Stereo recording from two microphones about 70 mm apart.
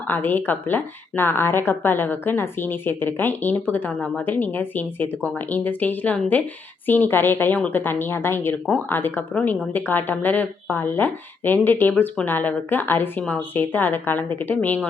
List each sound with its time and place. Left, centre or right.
0.1 s a woman's voice: left